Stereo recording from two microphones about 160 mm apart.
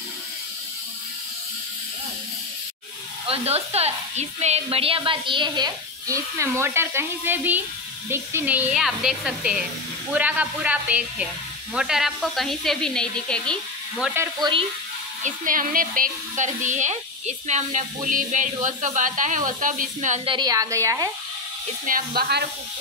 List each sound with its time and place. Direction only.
3.3 s a woman's voice: 40° right (ahead or behind); by 14.1 s centre (ahead or behind)
15.2 s a woman's voice: 60° right (ahead or behind)
20.2 s a woman's voice: 25° right (ahead or behind)
21.8 s speech: 65° right (ahead or behind)